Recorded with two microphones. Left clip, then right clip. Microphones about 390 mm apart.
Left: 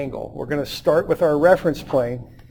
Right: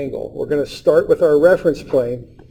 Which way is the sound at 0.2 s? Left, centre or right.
Left.